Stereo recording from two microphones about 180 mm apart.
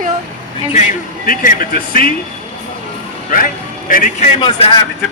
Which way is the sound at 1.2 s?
50° left (ahead or behind).